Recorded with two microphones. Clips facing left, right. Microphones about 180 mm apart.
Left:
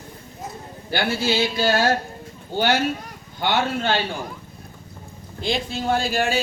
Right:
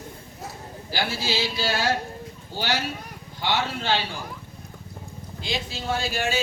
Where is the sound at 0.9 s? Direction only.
60° left (ahead or behind).